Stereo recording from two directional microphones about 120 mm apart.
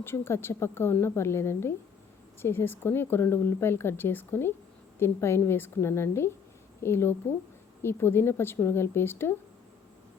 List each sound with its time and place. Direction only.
0.0 s speech: 20° left (ahead or behind)